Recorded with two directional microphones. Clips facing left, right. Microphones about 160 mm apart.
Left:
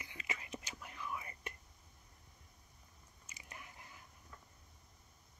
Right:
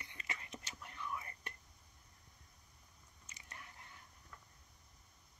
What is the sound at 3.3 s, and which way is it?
Biting, 10° left (ahead or behind).